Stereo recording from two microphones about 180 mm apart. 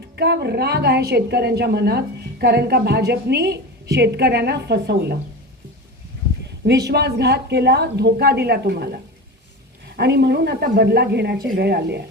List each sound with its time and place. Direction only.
0.2 s a woman's voice: 70° right (ahead or behind)
6.7 s speech: 65° right (ahead or behind)
10.0 s speech: 70° right (ahead or behind)